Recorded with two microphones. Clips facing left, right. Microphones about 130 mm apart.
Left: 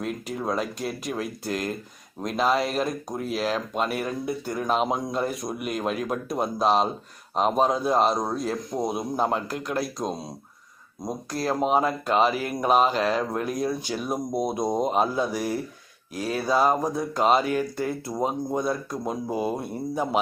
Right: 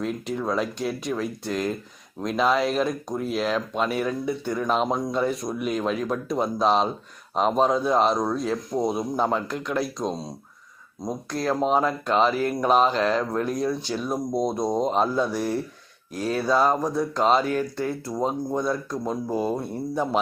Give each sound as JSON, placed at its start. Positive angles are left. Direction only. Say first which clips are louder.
{"t": 0.0, "sound": "speech", "louder": "right 2 dB", "side_deg": 5}